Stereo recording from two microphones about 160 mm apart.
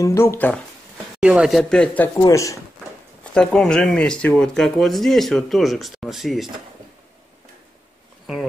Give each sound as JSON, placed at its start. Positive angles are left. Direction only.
{"t": 0.0, "sound": "speech", "side_deg": 15}
{"t": 1.2, "sound": "speech", "side_deg": -5}
{"t": 2.2, "sound": "speech", "side_deg": 20}
{"t": 3.3, "sound": "speech", "side_deg": 5}